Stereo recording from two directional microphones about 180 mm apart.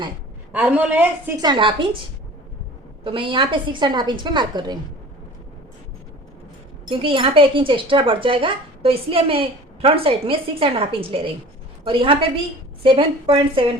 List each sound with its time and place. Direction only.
0.5 s a woman's voice: 10° right (ahead or behind)
1.4 s speech: 25° right (ahead or behind)
3.0 s speech: 30° right (ahead or behind)
6.9 s a woman's voice: 30° right (ahead or behind)